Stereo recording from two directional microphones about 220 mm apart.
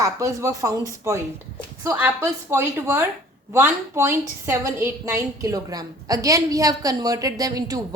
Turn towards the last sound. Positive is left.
turn(degrees=-15)  # may be behind; listen again after turning